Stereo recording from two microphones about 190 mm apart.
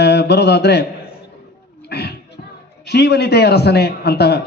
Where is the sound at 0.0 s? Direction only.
60° left (ahead or behind).